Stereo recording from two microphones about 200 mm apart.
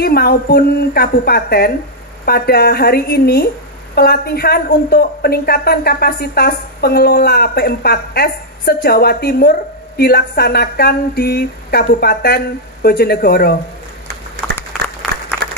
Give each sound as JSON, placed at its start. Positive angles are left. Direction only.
{"t": 0.0, "sound": "a woman's voice", "side_deg": 50}
{"t": 15.0, "sound": "applause", "side_deg": 10}
{"t": 15.4, "sound": "applause", "side_deg": -55}